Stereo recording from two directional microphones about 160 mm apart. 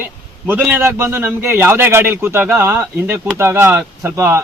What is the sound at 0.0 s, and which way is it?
A man's voice, 10° right (ahead or behind).